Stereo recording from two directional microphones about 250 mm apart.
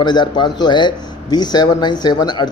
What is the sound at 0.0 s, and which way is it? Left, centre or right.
A man's voice, centre.